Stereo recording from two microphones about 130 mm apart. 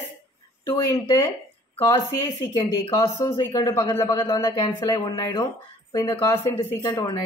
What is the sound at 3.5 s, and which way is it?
Speech, 25° left (ahead or behind).